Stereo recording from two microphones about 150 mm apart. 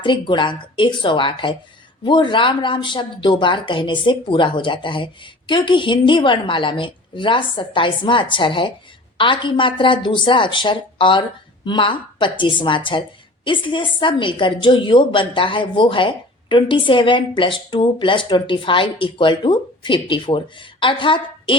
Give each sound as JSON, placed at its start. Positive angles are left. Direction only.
{"t": 0.0, "sound": "a woman's voice", "side_deg": 30}